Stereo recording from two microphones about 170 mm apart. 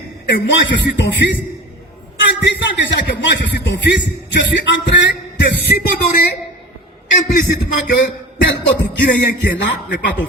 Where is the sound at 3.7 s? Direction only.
90° left.